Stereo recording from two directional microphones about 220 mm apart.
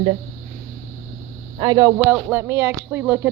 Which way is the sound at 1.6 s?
20° right (ahead or behind).